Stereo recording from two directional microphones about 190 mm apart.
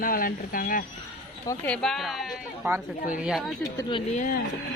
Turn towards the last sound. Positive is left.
turn(degrees=45)  # may be behind; listen again after turning